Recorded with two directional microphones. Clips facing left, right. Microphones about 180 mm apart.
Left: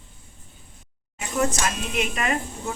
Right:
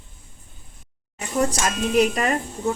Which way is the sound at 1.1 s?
35° right (ahead or behind).